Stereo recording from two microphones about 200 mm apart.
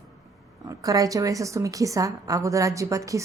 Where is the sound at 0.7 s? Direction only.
15° right (ahead or behind).